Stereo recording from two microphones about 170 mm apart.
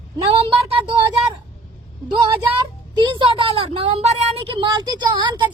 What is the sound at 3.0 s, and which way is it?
A woman's voice, 30° right (ahead or behind).